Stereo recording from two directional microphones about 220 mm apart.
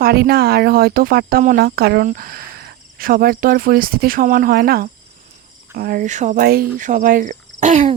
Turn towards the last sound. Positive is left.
turn(degrees=-30)  # may be behind; listen again after turning